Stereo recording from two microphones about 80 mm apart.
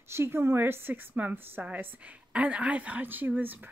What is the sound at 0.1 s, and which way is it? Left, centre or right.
A woman's voice, right.